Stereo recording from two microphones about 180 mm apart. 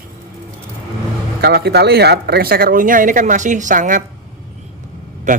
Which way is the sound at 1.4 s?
65° right (ahead or behind).